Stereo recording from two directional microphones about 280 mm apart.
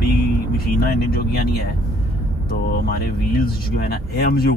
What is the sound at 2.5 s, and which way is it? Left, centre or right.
Speech, left.